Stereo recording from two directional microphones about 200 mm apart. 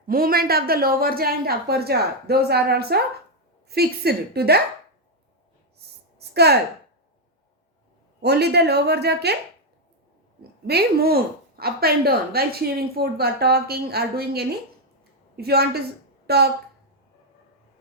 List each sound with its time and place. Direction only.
0.1 s a woman's voice: 45° right (ahead or behind)
6.1 s a sound: 55° right (ahead or behind)
8.2 s a woman's voice: 55° right (ahead or behind)
10.7 s a woman's voice: 50° right (ahead or behind)